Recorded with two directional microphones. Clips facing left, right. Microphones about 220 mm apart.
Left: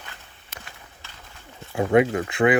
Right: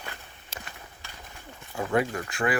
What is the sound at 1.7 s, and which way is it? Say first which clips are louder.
Speech: left 8 dB; 20° left (ahead or behind).